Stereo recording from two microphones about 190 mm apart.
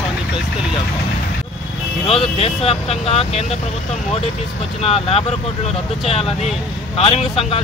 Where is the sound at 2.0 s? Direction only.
30° left (ahead or behind).